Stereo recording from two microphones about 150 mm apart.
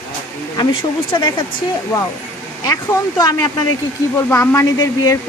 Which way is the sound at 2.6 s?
25° left (ahead or behind).